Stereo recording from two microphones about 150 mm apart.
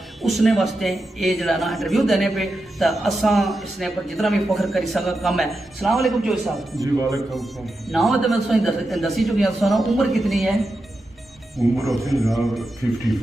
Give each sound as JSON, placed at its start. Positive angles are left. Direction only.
{"t": 0.2, "sound": "a man's voice", "side_deg": 0}
{"t": 6.8, "sound": "speech", "side_deg": -20}
{"t": 7.3, "sound": "a man's voice", "side_deg": 0}